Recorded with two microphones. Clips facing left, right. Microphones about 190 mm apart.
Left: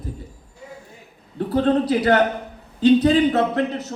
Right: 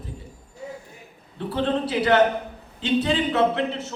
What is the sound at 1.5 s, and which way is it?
A man's voice, 40° left (ahead or behind).